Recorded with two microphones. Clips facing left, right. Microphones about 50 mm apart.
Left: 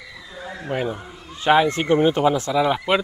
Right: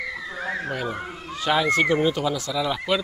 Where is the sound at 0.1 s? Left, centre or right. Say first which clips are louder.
Right 6 dB; right.